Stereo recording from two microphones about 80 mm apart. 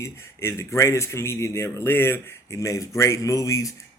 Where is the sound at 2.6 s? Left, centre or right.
Left.